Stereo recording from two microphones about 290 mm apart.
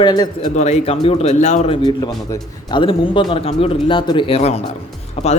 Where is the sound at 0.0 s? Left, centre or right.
Centre.